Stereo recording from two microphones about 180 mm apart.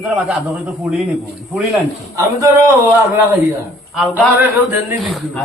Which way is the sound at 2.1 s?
15° right (ahead or behind).